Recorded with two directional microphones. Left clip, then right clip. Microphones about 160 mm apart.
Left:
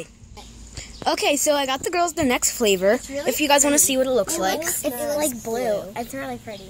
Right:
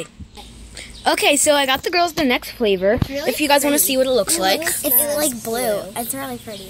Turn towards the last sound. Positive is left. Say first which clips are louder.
# right 2 dB
turn(degrees=0)  # may be behind; listen again after turning